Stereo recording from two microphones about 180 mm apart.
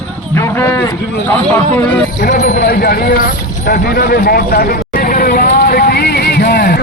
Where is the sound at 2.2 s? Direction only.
50° left (ahead or behind).